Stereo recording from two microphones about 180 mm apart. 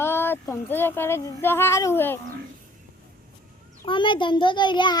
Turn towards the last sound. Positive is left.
turn(degrees=25)  # may be behind; listen again after turning